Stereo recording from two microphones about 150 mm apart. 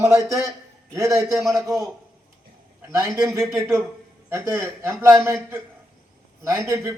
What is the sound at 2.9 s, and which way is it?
A man's voice, 20° right (ahead or behind).